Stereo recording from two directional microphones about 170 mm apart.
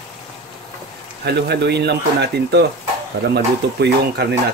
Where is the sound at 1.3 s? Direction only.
75° right (ahead or behind).